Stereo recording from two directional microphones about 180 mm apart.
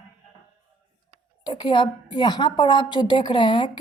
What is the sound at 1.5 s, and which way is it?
A woman's voice, 25° left (ahead or behind).